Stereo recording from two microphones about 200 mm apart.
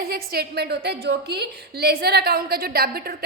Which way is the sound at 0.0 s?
50° right (ahead or behind).